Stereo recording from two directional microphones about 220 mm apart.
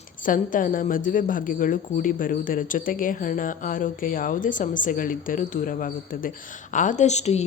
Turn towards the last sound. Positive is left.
turn(degrees=30)  # may be behind; listen again after turning